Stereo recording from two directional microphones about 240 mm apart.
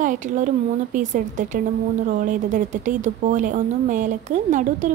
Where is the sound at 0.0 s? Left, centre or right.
Right.